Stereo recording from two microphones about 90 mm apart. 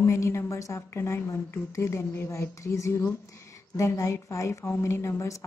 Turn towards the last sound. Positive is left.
turn(degrees=35)  # may be behind; listen again after turning